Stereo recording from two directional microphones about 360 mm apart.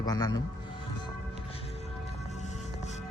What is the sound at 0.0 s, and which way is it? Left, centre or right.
Speech, centre.